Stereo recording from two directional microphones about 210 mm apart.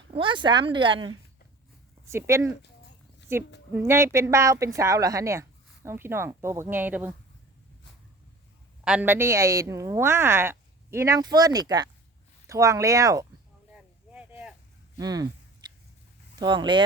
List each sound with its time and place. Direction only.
0.2 s speech: 20° right (ahead or behind)
2.0 s a woman's voice: 15° right (ahead or behind)
8.8 s a woman's voice: 5° right (ahead or behind)
13.7 s a sound: 5° right (ahead or behind)
14.9 s speech: 20° right (ahead or behind)
15.6 s biting: 20° right (ahead or behind)
16.3 s speech: 20° right (ahead or behind)